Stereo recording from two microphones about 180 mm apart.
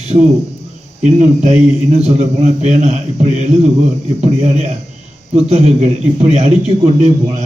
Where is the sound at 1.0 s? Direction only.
40° right (ahead or behind).